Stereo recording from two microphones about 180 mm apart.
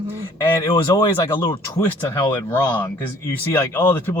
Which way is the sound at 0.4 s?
15° left (ahead or behind).